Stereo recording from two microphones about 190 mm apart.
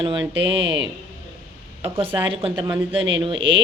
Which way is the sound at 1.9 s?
30° right (ahead or behind).